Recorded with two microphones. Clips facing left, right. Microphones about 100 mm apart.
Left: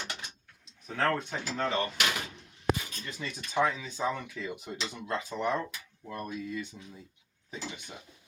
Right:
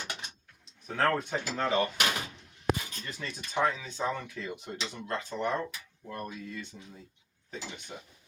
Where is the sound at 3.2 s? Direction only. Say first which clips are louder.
Left 1 dB; centre (ahead or behind).